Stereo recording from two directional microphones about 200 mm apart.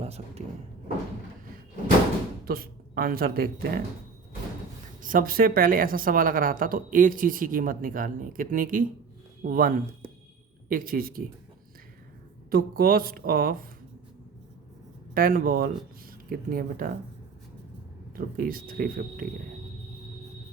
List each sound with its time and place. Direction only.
0.0 s speech: 30° right (ahead or behind)
2.5 s speech: 50° right (ahead or behind)
5.0 s a woman's voice: 45° right (ahead or behind)
12.5 s a woman's voice: 50° right (ahead or behind)
15.1 s a woman's voice: 45° right (ahead or behind)
18.2 s a woman's voice: 45° right (ahead or behind)